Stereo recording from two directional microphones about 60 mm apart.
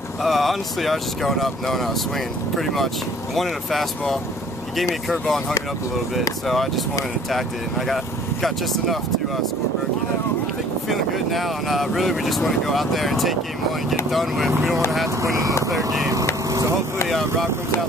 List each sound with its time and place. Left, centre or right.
0.2 s speech: centre
6.4 s speech: centre
7.9 s speech: centre
10.9 s speech: centre
15.2 s speech: right
16.4 s vehicle: right